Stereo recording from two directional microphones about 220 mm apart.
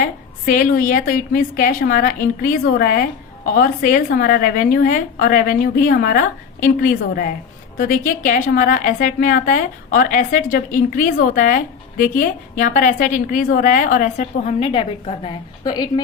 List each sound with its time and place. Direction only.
0.0 s a woman's voice: 40° left (ahead or behind); by 15.9 s 20° left (ahead or behind)